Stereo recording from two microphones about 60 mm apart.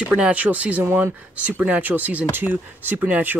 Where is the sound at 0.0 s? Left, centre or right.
Right.